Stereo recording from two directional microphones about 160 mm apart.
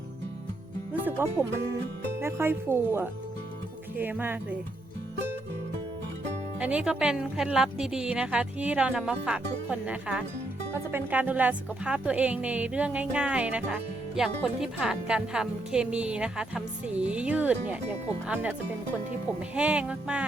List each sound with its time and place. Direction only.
1.0 s speech: 15° right (ahead or behind)
6.6 s speech: 10° right (ahead or behind)
19.5 s speech: 5° right (ahead or behind)